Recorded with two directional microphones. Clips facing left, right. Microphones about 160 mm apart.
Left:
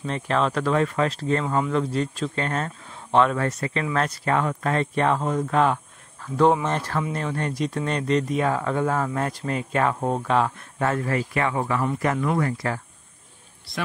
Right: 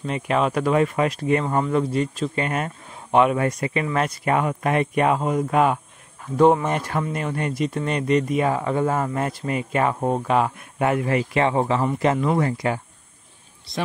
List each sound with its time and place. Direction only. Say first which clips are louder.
0.0 s speech: right 2 dB; 5° right (ahead or behind)